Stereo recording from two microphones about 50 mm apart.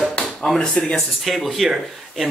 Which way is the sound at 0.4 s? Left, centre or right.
Centre.